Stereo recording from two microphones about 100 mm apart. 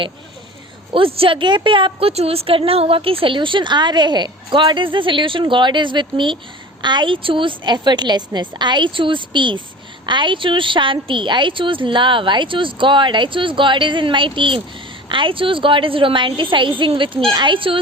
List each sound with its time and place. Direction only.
0.9 s a woman's voice: 65° right (ahead or behind)